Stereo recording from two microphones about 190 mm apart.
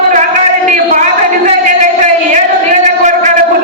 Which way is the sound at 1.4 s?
40° right (ahead or behind).